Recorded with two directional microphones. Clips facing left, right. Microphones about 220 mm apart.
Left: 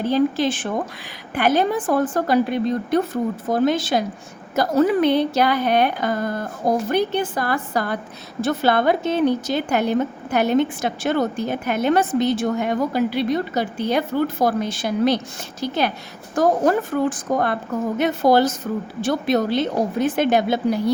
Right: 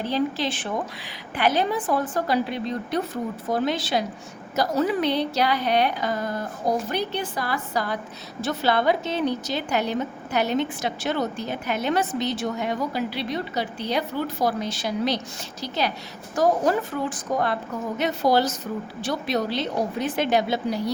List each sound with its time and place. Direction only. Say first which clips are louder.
0.0 s a woman's voice: left 6 dB; 50° left (ahead or behind)